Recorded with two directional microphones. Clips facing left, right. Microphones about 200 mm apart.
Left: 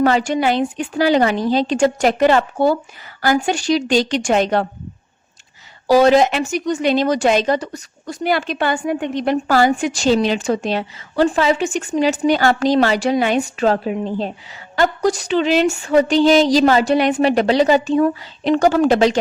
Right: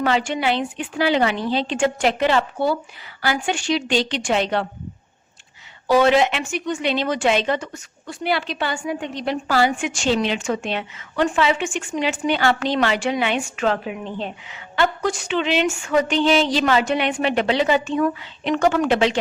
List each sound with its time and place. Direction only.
0.0 s a woman's voice: 40° left (ahead or behind)
5.9 s speech: 40° left (ahead or behind)